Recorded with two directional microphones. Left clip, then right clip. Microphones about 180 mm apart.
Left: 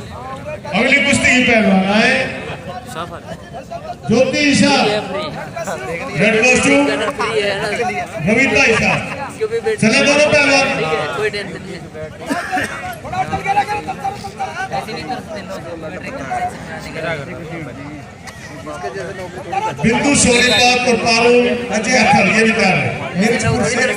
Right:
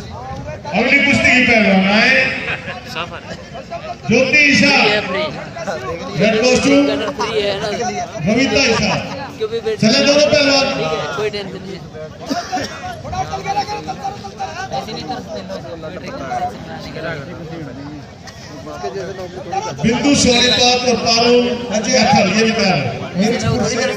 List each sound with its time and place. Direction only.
0.7 s a man's voice: 40° right (ahead or behind)
4.4 s a man's voice: 40° right (ahead or behind); by 11.4 s 60° right (ahead or behind)
12.3 s a sound: 55° right (ahead or behind)
13.3 s vehicle: 50° right (ahead or behind)
19.5 s a man's voice: 50° right (ahead or behind)